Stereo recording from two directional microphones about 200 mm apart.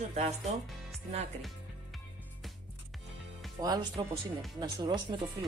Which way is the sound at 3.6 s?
20° right (ahead or behind).